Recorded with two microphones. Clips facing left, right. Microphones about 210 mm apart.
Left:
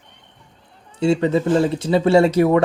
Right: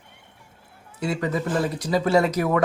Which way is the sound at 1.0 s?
25° left (ahead or behind).